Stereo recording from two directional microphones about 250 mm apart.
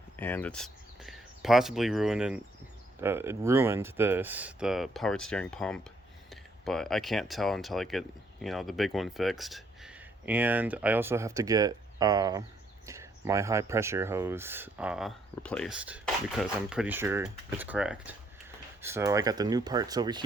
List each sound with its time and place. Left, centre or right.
0.2 s speech: centre